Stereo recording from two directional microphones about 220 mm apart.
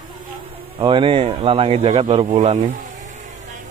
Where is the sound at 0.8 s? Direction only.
25° right (ahead or behind).